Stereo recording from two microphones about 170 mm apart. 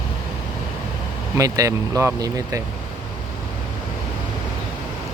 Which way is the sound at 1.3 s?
20° right (ahead or behind).